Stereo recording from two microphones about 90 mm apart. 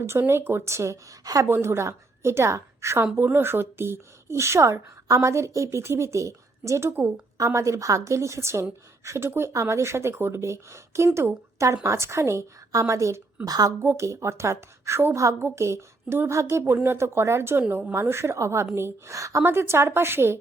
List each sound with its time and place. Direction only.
0.0 s speech: 30° right (ahead or behind)
1.5 s a woman's voice: 30° right (ahead or behind); by 13.7 s 45° right (ahead or behind)
13.8 s a woman's voice: 30° right (ahead or behind)